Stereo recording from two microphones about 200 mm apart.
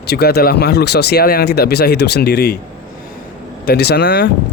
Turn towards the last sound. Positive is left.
turn(degrees=55)  # may be behind; listen again after turning